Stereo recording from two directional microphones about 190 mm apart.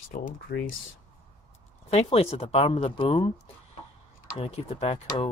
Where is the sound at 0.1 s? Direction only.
50° left (ahead or behind).